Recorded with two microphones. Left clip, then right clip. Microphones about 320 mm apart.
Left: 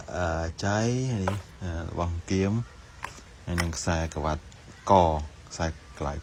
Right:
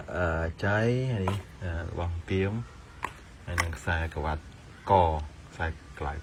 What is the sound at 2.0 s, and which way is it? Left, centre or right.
Speech, centre.